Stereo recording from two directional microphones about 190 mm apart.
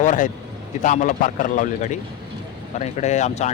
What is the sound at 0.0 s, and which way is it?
Speech, 40° left (ahead or behind).